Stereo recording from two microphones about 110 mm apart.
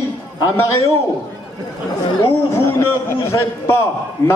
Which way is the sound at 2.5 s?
25° left (ahead or behind).